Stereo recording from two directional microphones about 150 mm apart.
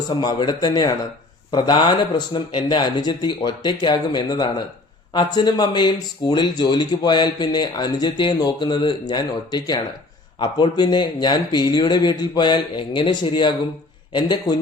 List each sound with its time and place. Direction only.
0.1 s speech: 30° left (ahead or behind)